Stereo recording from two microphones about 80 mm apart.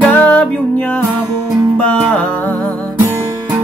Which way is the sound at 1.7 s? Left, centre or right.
Centre.